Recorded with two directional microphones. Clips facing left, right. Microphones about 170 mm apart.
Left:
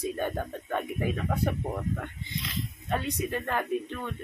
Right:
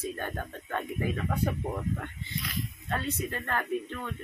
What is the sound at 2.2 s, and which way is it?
Speech, 20° left (ahead or behind).